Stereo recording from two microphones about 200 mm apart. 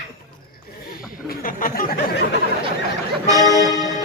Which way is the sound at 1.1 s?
45° left (ahead or behind).